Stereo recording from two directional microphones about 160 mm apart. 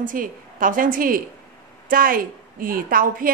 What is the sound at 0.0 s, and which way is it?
A woman's voice, 60° right (ahead or behind).